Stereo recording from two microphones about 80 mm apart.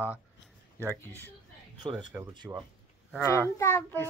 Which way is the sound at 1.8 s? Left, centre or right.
Right.